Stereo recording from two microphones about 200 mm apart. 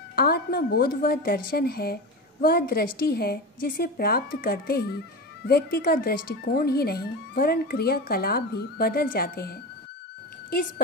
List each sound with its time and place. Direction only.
0.1 s speech: 50° left (ahead or behind)